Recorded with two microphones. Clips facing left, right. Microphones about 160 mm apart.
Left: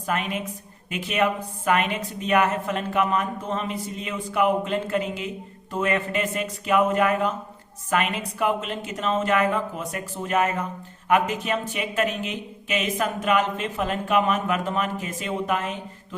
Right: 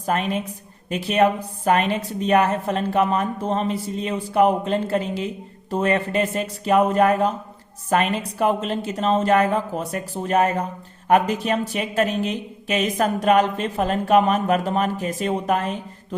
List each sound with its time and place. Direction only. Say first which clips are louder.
0.0 s a woman's voice: right 4 dB; 35° right (ahead or behind)